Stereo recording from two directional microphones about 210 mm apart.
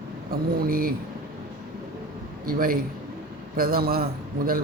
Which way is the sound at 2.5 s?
45° right (ahead or behind).